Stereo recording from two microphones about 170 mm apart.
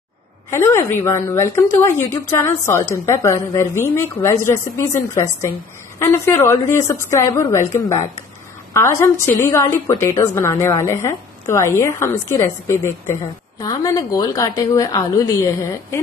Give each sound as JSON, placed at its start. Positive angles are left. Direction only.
{"t": 0.5, "sound": "a woman's voice", "side_deg": 15}